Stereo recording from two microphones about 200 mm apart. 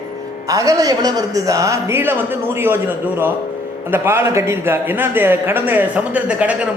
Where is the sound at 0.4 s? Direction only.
15° right (ahead or behind).